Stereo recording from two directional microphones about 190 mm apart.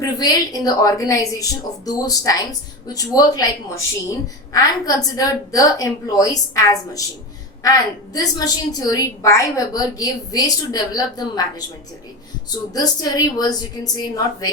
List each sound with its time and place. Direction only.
0.0 s a woman's voice: 20° left (ahead or behind)
12.5 s a woman's voice: 20° left (ahead or behind)